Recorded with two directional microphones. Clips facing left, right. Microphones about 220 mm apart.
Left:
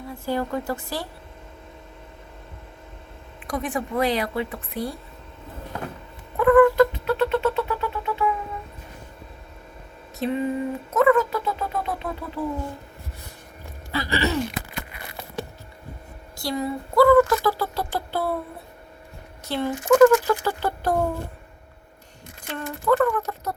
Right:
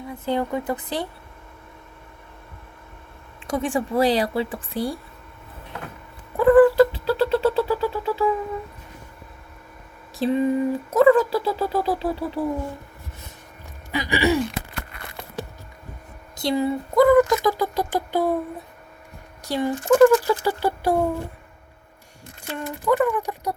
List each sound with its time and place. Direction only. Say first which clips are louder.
0.1 s speech: right 2 dB; 20° right (ahead or behind)
3.4 s speech: right 4 dB; 30° right (ahead or behind)
6.3 s cat: right 2 dB; 30° right (ahead or behind)
10.2 s speech: right 4 dB; 30° right (ahead or behind)
13.9 s a sound: right 3 dB; 15° right (ahead or behind)
16.4 s speech: right 5 dB; 25° right (ahead or behind)
19.5 s speech: right 1 dB; 15° right (ahead or behind)
22.4 s speech: even; 10° right (ahead or behind)